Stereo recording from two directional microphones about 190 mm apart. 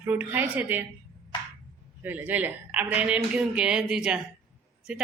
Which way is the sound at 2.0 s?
10° right (ahead or behind).